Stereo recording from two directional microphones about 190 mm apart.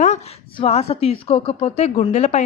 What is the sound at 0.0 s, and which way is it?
Speech, 35° left (ahead or behind).